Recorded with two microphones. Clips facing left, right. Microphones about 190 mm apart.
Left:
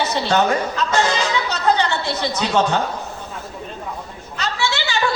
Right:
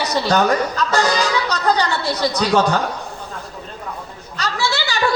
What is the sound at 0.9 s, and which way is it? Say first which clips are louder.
Music: right 1 dB; 40° right (ahead or behind).